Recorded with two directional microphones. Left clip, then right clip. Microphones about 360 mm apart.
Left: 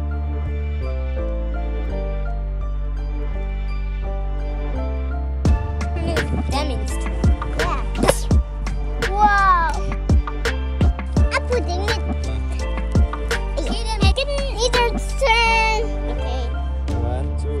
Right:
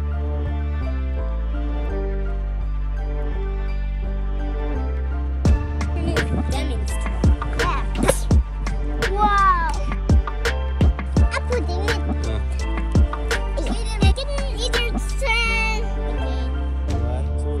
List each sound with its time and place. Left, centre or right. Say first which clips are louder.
5.4 s music: even; centre
9.1 s music: left 2 dB; left
9.8 s music: left 1 dB; centre